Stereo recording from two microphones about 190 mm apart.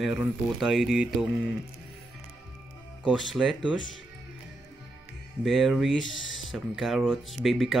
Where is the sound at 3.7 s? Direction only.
80° left.